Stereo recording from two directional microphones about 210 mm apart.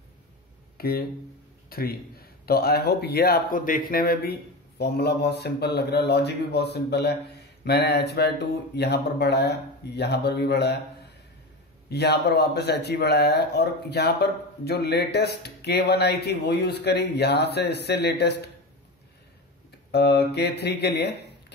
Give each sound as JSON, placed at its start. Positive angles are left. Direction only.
{"t": 0.7, "sound": "speech", "side_deg": 45}
{"t": 11.9, "sound": "speech", "side_deg": 50}
{"t": 19.9, "sound": "speech", "side_deg": 50}